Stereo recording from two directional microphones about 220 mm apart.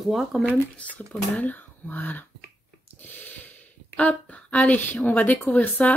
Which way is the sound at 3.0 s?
10° left (ahead or behind).